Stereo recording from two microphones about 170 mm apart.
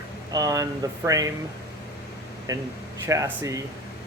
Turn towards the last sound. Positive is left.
turn(degrees=-20)  # may be behind; listen again after turning